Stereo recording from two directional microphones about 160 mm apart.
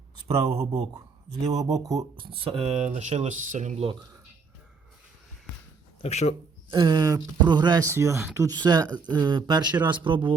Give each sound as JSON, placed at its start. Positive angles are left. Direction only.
{"t": 0.3, "sound": "speech", "side_deg": -40}
{"t": 1.5, "sound": "speech", "side_deg": -20}
{"t": 2.1, "sound": "speech", "side_deg": -35}
{"t": 2.8, "sound": "speech", "side_deg": -45}
{"t": 6.0, "sound": "speech", "side_deg": 40}
{"t": 6.7, "sound": "speech", "side_deg": -30}